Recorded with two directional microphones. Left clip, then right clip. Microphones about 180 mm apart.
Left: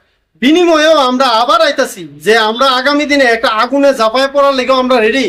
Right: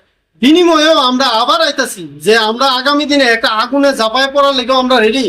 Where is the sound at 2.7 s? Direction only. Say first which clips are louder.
Left 1 dB; 30° left (ahead or behind).